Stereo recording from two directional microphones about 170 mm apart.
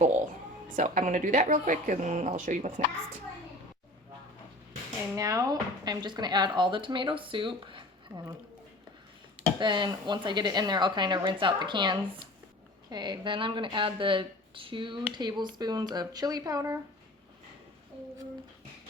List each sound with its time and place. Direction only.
0.8 s speech: 50° right (ahead or behind)
5.1 s speech: 20° right (ahead or behind)
9.6 s speech: 25° right (ahead or behind)